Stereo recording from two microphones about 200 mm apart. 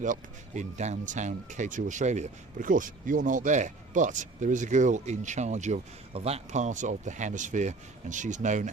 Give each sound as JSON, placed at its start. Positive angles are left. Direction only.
{"t": 0.0, "sound": "speech", "side_deg": -40}